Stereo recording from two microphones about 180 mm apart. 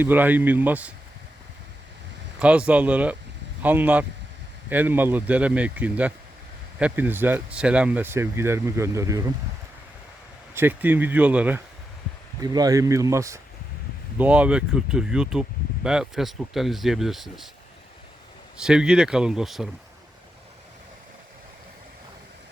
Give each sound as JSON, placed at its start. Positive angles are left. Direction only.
{"t": 0.0, "sound": "speech", "side_deg": -10}
{"t": 2.4, "sound": "speech", "side_deg": -5}
{"t": 10.5, "sound": "speech", "side_deg": -10}
{"t": 12.4, "sound": "speech", "side_deg": -20}
{"t": 18.5, "sound": "speech", "side_deg": -5}